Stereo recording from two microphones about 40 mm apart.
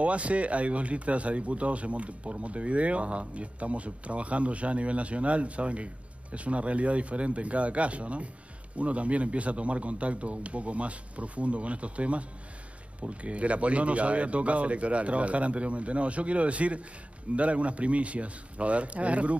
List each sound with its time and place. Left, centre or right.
0.0 s speech: right